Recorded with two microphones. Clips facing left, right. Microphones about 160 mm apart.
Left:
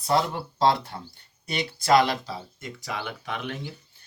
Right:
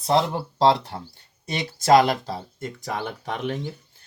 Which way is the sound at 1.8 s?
45° right (ahead or behind).